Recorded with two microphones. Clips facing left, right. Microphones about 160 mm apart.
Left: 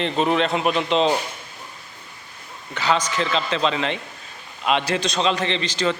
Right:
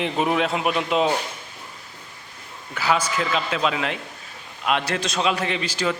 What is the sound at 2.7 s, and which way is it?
A man's voice, 10° right (ahead or behind).